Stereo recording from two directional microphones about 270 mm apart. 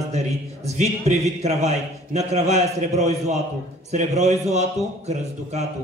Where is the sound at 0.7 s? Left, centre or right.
Right.